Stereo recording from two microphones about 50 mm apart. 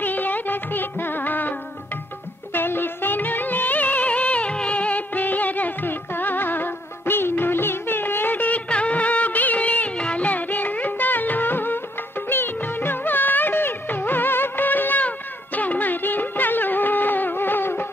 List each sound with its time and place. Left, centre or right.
0.0 s music: left
2.5 s music: left
8.6 s music of bollywood: left
12.3 s music: left